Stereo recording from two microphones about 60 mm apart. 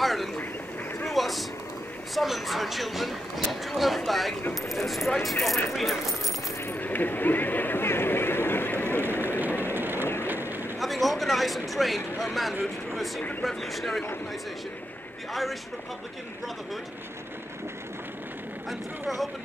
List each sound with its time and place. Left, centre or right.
0.0 s a sound: centre
2.1 s speech: centre
6.6 s a sound: left
9.0 s run: right
9.8 s train: right
10.2 s boat: right
10.8 s speech: centre
18.7 s speech: centre